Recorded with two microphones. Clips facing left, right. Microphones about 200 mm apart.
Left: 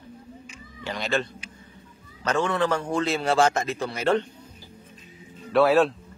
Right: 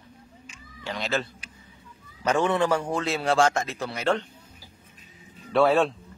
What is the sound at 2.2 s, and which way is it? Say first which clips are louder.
A man's voice: right 1 dB; 15° right (ahead or behind).